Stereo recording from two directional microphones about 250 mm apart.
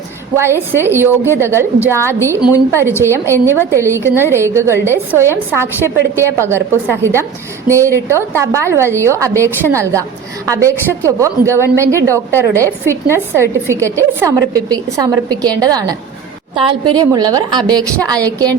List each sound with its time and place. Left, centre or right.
0.3 s a woman's voice: centre